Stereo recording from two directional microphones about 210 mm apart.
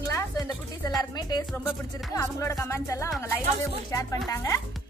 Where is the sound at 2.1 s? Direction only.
15° left (ahead or behind).